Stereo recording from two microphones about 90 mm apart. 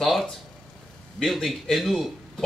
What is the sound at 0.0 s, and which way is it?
Speech, centre (ahead or behind).